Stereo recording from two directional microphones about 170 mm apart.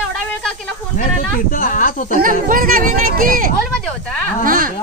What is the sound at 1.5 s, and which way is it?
Speech, 55° left (ahead or behind).